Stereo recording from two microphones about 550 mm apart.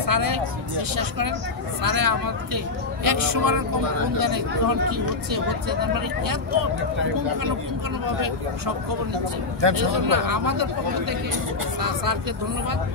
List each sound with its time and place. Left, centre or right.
0.0 s speech: right
9.6 s speech: right